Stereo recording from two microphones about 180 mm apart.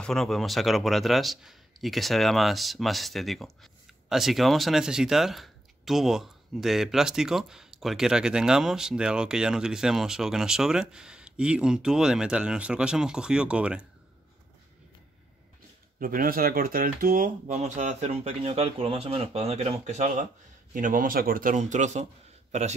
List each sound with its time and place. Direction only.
0.0 s speech: centre (ahead or behind)
16.0 s a man's voice: 50° right (ahead or behind)